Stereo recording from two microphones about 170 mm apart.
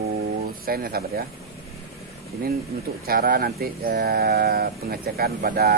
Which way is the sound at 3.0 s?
60° right (ahead or behind).